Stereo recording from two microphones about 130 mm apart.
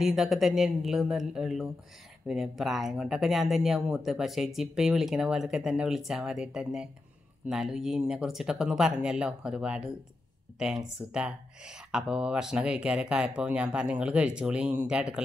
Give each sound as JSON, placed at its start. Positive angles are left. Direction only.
{"t": 0.0, "sound": "speech", "side_deg": 0}